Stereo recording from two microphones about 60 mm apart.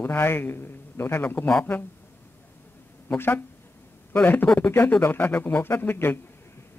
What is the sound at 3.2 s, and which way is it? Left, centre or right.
A man's voice, left.